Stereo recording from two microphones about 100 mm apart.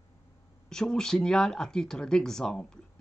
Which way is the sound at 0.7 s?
5° left (ahead or behind).